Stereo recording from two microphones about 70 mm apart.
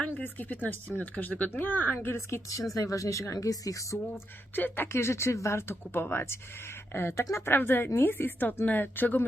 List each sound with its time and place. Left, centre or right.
0.1 s a woman's voice: left
2.1 s speech: left
4.5 s a woman's voice: left